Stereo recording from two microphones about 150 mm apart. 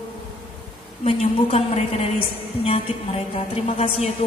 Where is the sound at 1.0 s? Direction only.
40° left (ahead or behind).